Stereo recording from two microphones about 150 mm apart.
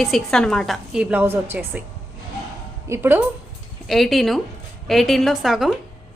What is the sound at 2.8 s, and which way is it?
Speech, 15° right (ahead or behind).